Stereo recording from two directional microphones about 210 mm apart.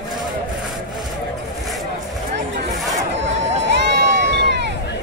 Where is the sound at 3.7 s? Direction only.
55° right (ahead or behind).